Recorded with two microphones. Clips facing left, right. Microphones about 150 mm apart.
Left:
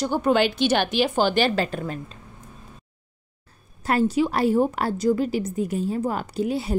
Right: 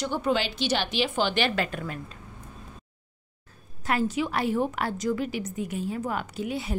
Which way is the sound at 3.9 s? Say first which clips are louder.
Left 5 dB; 35° left (ahead or behind).